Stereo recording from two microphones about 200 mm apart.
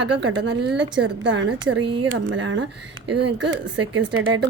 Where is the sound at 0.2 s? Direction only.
70° right (ahead or behind).